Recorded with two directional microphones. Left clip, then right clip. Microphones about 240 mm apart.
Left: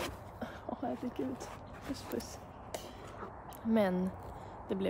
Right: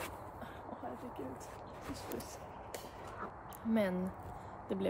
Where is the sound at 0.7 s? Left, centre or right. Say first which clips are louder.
Left 6 dB; left.